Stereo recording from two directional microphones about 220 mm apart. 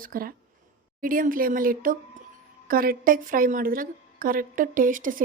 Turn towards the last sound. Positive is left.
turn(degrees=-40)  # may be behind; listen again after turning